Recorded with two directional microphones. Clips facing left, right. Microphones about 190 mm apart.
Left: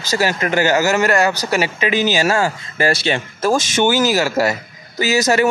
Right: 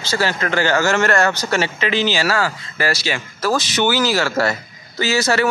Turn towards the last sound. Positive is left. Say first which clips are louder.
# left 2 dB
turn(degrees=20)  # may be behind; listen again after turning